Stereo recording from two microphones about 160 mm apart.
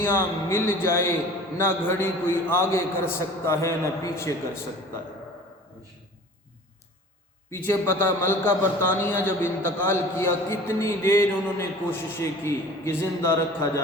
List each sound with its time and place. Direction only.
0.0 s a man's voice: 15° left (ahead or behind)
7.5 s a man's voice: 15° left (ahead or behind)